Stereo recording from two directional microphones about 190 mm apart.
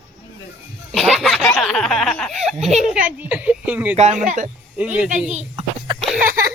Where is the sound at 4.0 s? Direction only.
40° right (ahead or behind).